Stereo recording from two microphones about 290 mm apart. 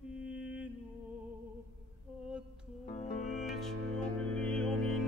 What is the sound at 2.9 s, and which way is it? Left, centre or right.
Music, left.